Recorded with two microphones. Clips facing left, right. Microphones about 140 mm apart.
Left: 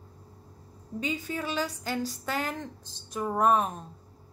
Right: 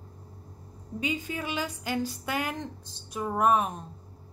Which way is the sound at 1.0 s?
15° right (ahead or behind).